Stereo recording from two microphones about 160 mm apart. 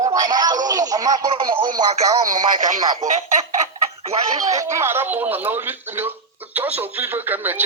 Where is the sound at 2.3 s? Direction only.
55° right (ahead or behind).